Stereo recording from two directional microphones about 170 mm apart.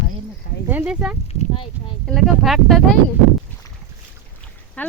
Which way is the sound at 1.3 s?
30° left (ahead or behind).